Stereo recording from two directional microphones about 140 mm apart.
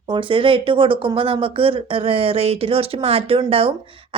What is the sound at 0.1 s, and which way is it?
A woman's voice, 40° right (ahead or behind).